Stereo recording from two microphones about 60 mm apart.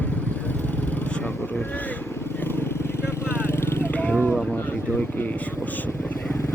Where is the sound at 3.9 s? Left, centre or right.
Left.